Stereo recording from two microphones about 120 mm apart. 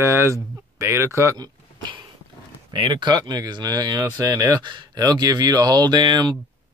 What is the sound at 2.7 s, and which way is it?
Speech, 45° right (ahead or behind).